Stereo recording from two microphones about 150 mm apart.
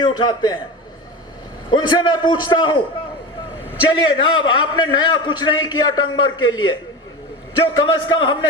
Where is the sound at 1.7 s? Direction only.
30° left (ahead or behind).